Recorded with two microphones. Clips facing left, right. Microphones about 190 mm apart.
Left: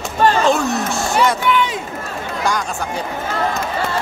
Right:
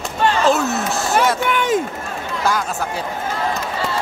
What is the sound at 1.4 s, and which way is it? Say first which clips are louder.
Speech: even; 50° right (ahead or behind).